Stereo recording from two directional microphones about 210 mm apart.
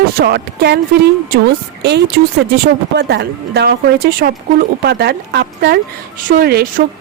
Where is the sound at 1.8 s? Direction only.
55° right (ahead or behind).